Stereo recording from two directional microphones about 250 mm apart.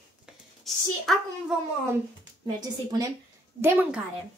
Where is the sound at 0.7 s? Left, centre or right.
Centre.